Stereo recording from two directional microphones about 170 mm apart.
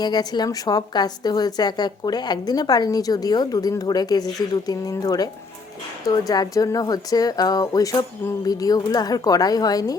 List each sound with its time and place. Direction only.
0.0 s a woman's voice: 25° left (ahead or behind)